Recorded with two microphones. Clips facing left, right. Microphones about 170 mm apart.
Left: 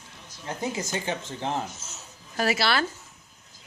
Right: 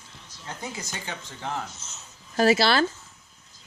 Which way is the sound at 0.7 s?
20° left (ahead or behind).